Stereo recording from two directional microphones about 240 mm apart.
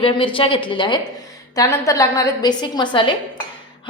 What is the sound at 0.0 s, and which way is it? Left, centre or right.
A woman's voice, left.